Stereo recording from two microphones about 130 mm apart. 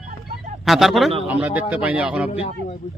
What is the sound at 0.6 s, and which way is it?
Speech, centre (ahead or behind).